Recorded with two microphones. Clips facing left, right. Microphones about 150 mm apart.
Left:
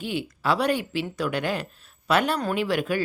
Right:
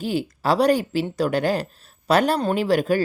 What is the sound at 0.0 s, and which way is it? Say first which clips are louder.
Speech: right 4 dB; 40° right (ahead or behind).